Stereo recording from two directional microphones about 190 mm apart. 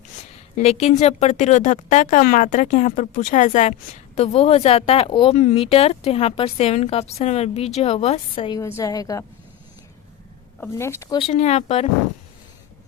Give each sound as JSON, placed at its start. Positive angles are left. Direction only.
{"t": 0.5, "sound": "speech", "side_deg": 35}
{"t": 8.4, "sound": "a woman's voice", "side_deg": 15}
{"t": 10.6, "sound": "speech", "side_deg": 15}
{"t": 11.2, "sound": "speech", "side_deg": 35}